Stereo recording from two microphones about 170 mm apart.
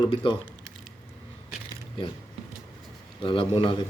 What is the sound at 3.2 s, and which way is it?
Speech, 30° left (ahead or behind).